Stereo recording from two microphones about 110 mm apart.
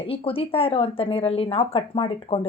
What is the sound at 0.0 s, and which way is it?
A woman's voice, 55° left (ahead or behind).